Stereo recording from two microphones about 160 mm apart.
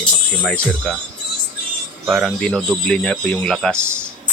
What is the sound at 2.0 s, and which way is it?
Speech, centre (ahead or behind).